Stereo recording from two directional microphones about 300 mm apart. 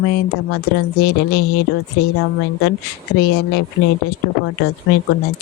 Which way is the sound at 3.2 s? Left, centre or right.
Left.